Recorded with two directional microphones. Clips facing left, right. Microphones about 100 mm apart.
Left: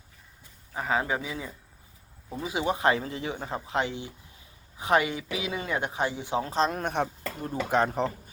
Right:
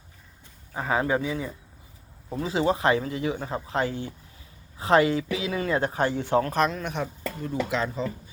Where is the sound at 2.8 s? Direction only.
30° left (ahead or behind).